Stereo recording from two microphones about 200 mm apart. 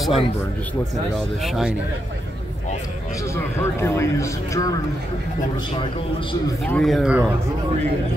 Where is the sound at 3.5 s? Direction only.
15° left (ahead or behind).